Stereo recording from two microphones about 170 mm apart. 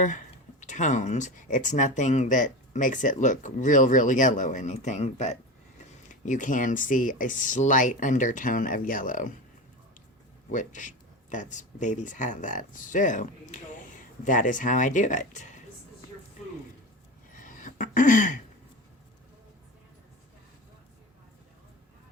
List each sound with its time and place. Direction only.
0.6 s speech: 45° left (ahead or behind)
10.5 s speech: 50° left (ahead or behind)
17.3 s a sound: 50° left (ahead or behind)